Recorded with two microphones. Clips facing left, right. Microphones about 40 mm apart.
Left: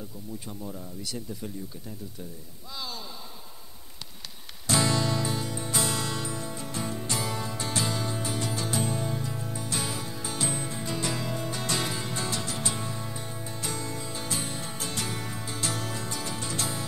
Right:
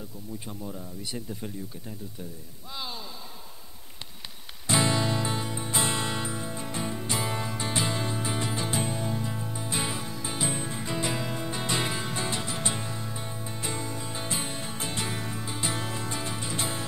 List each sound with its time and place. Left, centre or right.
0.5 s speech: centre
1.0 s speech: right
2.7 s speech: right
4.6 s music: right